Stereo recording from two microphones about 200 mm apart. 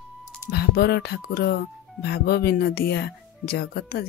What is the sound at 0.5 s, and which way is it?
Speech, 55° left (ahead or behind).